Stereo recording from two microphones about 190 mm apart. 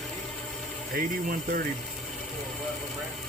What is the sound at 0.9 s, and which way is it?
Speech, 50° right (ahead or behind).